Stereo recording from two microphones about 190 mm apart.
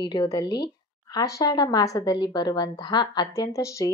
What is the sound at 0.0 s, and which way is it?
A woman's voice, 20° left (ahead or behind).